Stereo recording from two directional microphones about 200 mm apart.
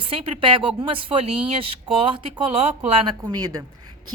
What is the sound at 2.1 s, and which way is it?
A woman's voice, 25° right (ahead or behind).